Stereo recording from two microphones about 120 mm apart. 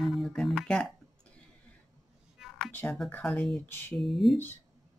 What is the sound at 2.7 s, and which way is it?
Speech, 15° left (ahead or behind).